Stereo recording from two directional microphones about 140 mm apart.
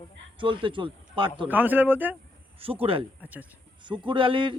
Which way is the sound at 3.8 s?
35° right (ahead or behind).